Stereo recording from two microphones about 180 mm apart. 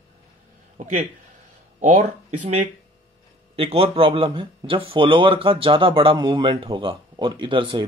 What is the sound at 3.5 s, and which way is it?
A man's voice, 30° right (ahead or behind).